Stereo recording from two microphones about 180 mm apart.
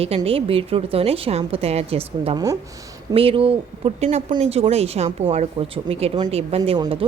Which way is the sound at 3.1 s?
30° right (ahead or behind).